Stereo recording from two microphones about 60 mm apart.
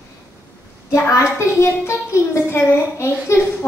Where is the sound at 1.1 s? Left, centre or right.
Left.